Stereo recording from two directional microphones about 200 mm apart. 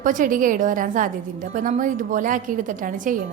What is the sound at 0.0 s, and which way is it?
A woman's voice, 40° right (ahead or behind).